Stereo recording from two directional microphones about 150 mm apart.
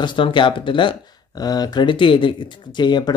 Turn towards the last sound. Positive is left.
turn(degrees=30)  # may be behind; listen again after turning